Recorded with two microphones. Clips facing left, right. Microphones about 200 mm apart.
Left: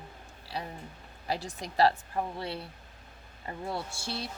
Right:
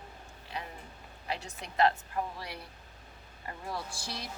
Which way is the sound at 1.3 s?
35° left (ahead or behind).